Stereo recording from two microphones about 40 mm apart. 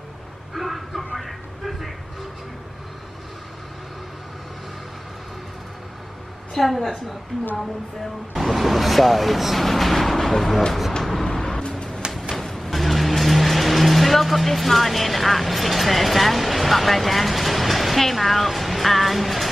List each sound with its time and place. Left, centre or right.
0.6 s a sound: centre
6.5 s speech: centre
8.4 s speech: centre
11.1 s vehicle: centre
12.0 s a sound: right
12.4 s vehicle: centre